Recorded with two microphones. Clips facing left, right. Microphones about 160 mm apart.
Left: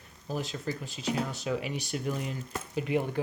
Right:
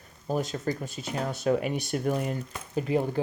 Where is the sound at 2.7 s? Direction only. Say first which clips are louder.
Right 3 dB; 35° right (ahead or behind).